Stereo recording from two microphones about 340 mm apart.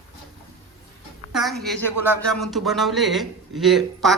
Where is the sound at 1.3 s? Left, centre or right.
Centre.